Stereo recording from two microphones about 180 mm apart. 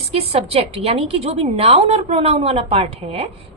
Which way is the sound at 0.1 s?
35° right (ahead or behind).